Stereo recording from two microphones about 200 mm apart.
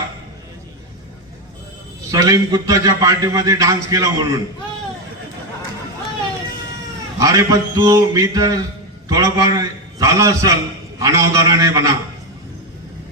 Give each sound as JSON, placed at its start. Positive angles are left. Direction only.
{"t": 2.0, "sound": "a man's voice", "side_deg": -15}
{"t": 7.2, "sound": "a man's voice", "side_deg": -15}